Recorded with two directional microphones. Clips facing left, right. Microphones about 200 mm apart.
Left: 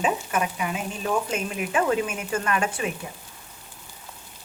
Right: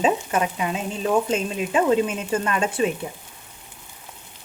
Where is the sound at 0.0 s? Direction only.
25° right (ahead or behind).